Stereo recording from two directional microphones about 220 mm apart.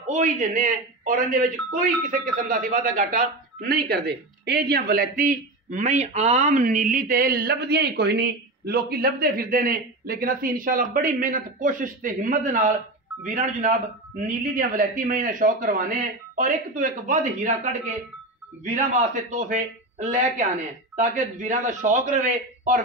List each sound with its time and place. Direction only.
0.0 s speech: 35° right (ahead or behind)